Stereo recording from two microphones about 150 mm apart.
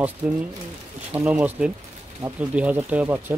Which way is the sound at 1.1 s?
10° right (ahead or behind).